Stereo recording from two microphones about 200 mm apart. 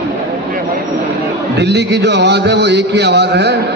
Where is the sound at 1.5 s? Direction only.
60° right (ahead or behind).